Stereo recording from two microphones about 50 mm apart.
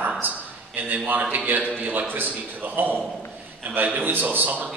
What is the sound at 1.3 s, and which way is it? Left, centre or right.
A man's voice, right.